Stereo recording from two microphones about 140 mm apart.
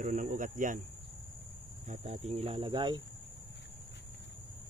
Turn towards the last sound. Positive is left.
turn(degrees=-35)  # may be behind; listen again after turning